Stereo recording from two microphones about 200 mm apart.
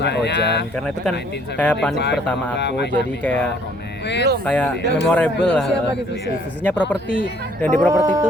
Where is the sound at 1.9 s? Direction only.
60° left (ahead or behind).